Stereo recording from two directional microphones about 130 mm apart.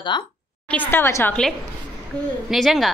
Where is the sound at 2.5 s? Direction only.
Centre (ahead or behind).